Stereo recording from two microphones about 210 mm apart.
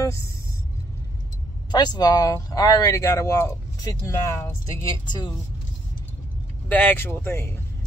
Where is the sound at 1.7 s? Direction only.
20° left (ahead or behind).